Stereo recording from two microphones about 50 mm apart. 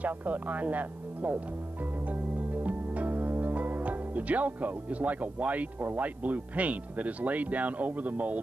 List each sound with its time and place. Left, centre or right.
0.0 s speech: right
2.0 s music: right